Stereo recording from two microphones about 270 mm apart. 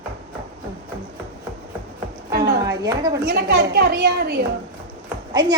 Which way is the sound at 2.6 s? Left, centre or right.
Centre.